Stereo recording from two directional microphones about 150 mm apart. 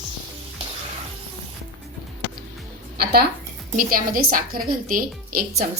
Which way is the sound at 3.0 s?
90° right.